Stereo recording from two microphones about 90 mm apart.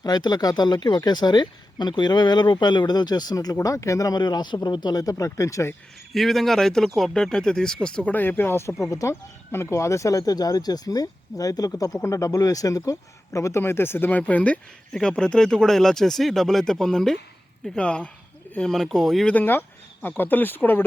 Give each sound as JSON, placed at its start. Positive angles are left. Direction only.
{"t": 0.0, "sound": "speech", "side_deg": 50}
{"t": 6.1, "sound": "speech", "side_deg": 0}
{"t": 19.3, "sound": "speech", "side_deg": 20}